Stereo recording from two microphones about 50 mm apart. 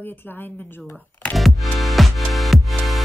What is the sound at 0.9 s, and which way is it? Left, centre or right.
Music, left.